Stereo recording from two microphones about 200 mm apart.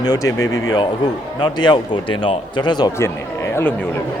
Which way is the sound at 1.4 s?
20° left (ahead or behind).